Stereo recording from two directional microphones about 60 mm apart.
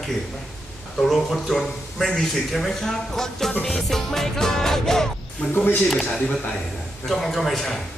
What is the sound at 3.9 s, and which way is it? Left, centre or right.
Music, centre.